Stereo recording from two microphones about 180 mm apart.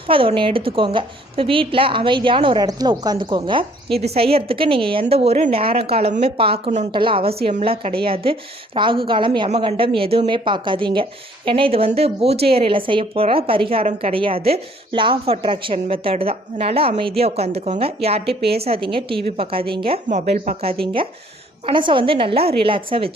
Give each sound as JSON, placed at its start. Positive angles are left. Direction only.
{"t": 0.1, "sound": "a woman's voice", "side_deg": -30}
{"t": 20.1, "sound": "speech", "side_deg": -45}
{"t": 20.8, "sound": "a woman's voice", "side_deg": -30}